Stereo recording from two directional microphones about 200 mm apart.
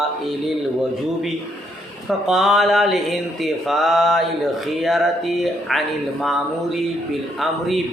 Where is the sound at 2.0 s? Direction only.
Centre (ahead or behind).